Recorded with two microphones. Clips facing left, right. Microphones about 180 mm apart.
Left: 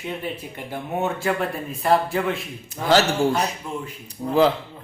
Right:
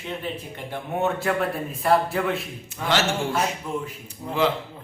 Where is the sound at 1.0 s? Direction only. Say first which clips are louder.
Right 1 dB; centre (ahead or behind).